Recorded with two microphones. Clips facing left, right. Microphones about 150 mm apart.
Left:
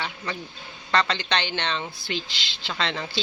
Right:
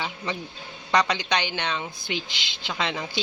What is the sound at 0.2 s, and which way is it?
Speech, 20° right (ahead or behind).